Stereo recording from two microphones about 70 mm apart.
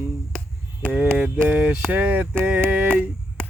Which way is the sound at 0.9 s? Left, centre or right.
Right.